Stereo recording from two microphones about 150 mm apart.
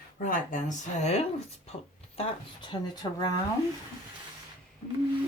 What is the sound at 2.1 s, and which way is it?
Speech, 40° left (ahead or behind).